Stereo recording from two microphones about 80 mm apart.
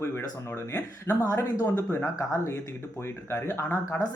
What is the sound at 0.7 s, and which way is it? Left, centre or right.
Speech, left.